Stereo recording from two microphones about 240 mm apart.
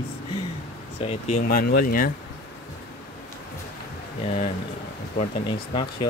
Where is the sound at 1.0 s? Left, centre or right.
Left.